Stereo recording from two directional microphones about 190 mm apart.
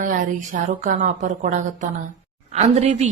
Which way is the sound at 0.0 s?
45° right (ahead or behind).